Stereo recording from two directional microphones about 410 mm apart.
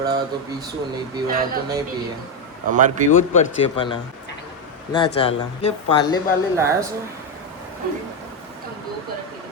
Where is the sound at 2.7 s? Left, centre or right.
Centre.